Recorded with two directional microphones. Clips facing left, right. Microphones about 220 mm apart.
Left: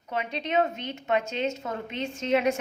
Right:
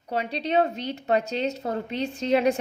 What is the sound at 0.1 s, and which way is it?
A woman's voice, 35° right (ahead or behind).